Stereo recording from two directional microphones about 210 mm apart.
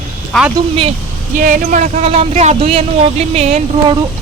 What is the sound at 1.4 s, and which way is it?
Speech, 40° right (ahead or behind).